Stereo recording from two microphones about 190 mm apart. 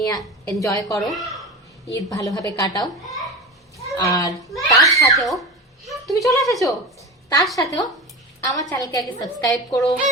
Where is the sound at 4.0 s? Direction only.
15° left (ahead or behind).